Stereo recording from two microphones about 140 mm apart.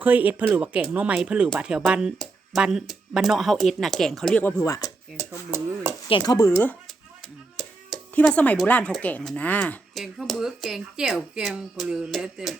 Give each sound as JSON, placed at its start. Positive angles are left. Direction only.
{"t": 0.0, "sound": "speech", "side_deg": -10}
{"t": 5.5, "sound": "speech", "side_deg": -20}
{"t": 6.1, "sound": "speech", "side_deg": 30}
{"t": 8.2, "sound": "speech", "side_deg": 10}
{"t": 10.0, "sound": "speech", "side_deg": 0}